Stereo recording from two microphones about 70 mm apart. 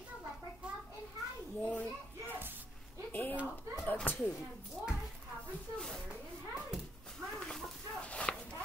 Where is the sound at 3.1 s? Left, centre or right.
Left.